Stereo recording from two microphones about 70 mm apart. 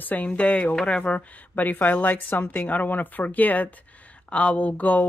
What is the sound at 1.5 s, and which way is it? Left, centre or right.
Speech, left.